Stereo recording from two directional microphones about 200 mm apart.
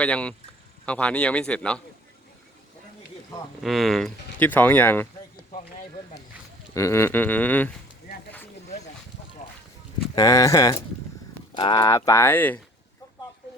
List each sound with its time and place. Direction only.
0.0 s speech: 5° left (ahead or behind)
3.6 s speech: centre (ahead or behind)
6.7 s speech: 15° left (ahead or behind)
10.2 s speech: 15° left (ahead or behind)